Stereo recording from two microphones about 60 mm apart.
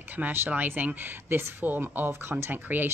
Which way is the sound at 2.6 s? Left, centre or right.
Right.